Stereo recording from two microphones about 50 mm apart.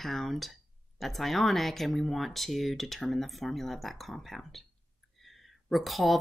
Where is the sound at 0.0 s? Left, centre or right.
Centre.